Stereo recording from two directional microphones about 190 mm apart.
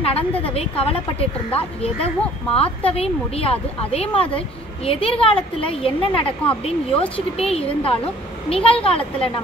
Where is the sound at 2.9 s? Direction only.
30° left (ahead or behind).